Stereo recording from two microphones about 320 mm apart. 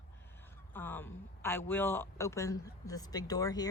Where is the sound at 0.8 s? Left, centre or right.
Centre.